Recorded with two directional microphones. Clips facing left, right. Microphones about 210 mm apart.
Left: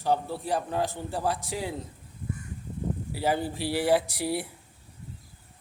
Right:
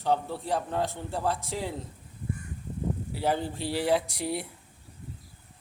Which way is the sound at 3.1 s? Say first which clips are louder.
Left 2 dB; 5° left (ahead or behind).